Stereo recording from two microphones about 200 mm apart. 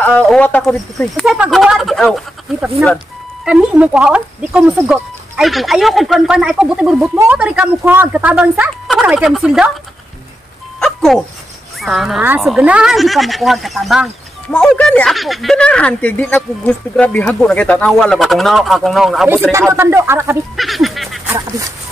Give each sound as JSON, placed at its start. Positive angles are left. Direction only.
{"t": 0.0, "sound": "speech", "side_deg": 5}
{"t": 10.8, "sound": "dog", "side_deg": 0}
{"t": 11.8, "sound": "speech", "side_deg": 0}
{"t": 19.7, "sound": "speech", "side_deg": -15}
{"t": 20.5, "sound": "goose", "side_deg": 0}